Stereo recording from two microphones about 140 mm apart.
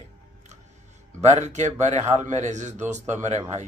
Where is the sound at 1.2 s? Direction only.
55° right (ahead or behind).